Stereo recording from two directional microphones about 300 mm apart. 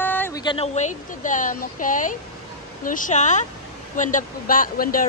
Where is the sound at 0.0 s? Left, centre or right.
Centre.